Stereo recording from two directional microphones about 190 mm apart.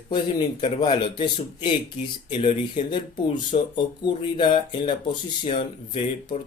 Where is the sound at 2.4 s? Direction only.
25° left (ahead or behind).